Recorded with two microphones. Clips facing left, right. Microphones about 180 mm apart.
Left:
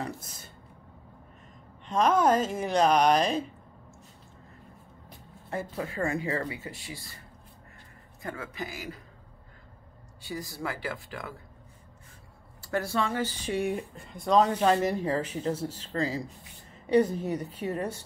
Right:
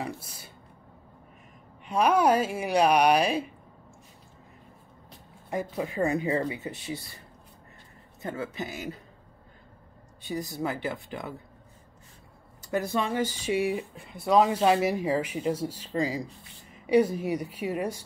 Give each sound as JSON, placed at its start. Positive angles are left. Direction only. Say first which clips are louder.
{"t": 0.0, "sound": "speech", "louder": "right 1 dB", "side_deg": -10}
{"t": 1.9, "sound": "speech", "louder": "right 1 dB", "side_deg": -10}
{"t": 5.5, "sound": "speech", "louder": "right 3 dB", "side_deg": -15}
{"t": 8.2, "sound": "speech", "louder": "right 3 dB", "side_deg": -25}
{"t": 10.2, "sound": "speech", "louder": "right 4 dB", "side_deg": -20}
{"t": 12.7, "sound": "speech", "louder": "right 1 dB", "side_deg": -15}